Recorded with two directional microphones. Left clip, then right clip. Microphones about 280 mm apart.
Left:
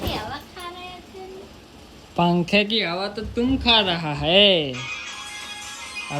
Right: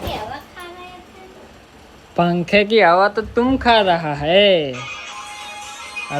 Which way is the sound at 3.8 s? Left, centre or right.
Centre.